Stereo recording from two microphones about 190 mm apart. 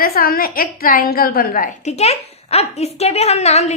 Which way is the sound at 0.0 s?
50° left (ahead or behind).